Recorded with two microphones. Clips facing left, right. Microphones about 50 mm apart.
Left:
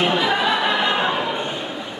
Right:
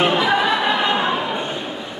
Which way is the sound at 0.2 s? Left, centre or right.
Centre.